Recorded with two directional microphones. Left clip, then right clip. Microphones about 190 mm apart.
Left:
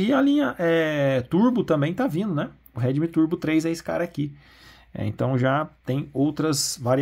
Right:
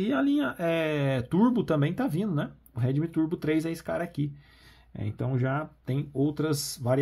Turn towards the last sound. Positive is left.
turn(degrees=20)  # may be behind; listen again after turning